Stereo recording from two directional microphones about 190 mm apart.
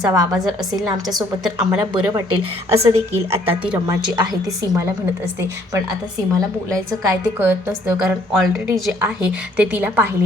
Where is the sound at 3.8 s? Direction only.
20° right (ahead or behind).